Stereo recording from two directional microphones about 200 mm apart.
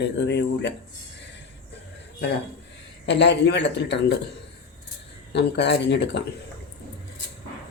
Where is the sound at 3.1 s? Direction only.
60° left (ahead or behind).